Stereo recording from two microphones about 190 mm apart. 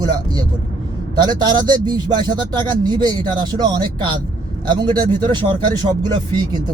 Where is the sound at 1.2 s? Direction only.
20° right (ahead or behind).